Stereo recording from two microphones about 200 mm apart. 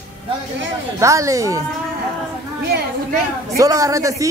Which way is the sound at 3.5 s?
15° right (ahead or behind).